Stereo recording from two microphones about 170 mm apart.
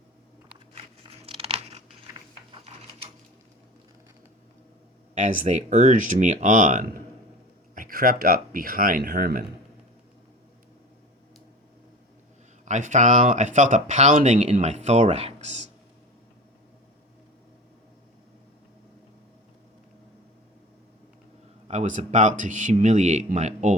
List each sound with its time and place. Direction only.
0.7 s a sound: 35° right (ahead or behind)
5.1 s speech: 45° right (ahead or behind)
12.6 s speech: 45° right (ahead or behind)
21.7 s speech: 45° right (ahead or behind)